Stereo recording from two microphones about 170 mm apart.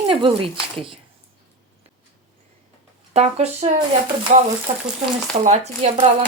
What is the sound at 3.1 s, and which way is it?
Speech, 40° right (ahead or behind).